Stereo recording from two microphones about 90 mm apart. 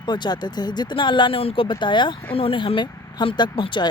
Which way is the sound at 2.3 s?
80° left.